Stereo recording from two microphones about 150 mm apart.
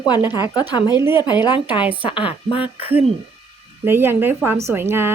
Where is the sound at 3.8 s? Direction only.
15° right (ahead or behind).